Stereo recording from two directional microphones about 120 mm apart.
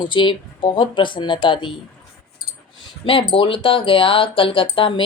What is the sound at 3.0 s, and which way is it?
Speech, 45° left (ahead or behind).